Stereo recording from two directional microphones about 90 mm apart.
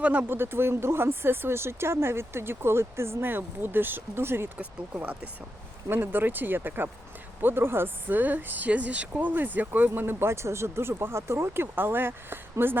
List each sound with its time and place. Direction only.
0.0 s speech: 15° right (ahead or behind)